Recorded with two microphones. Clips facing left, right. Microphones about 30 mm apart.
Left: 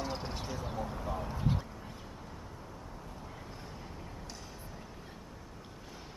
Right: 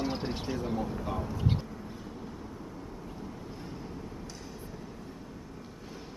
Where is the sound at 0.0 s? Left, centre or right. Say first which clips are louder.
Right 5 dB; right.